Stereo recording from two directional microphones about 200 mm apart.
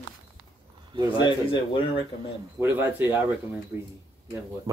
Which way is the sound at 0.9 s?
25° right (ahead or behind).